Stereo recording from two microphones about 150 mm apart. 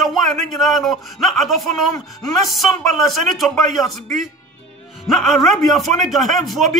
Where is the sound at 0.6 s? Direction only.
Centre (ahead or behind).